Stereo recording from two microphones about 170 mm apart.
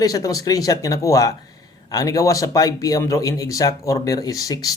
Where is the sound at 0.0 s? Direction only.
20° left (ahead or behind).